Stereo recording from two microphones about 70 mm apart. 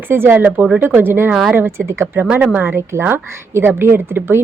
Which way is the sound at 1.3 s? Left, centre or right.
Centre.